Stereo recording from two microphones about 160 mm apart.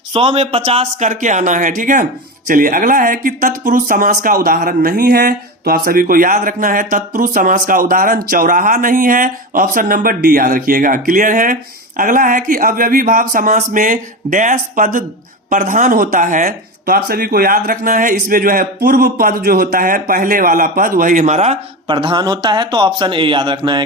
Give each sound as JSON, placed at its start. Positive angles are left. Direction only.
{"t": 0.1, "sound": "speech", "side_deg": -35}
{"t": 21.8, "sound": "a man's voice", "side_deg": -30}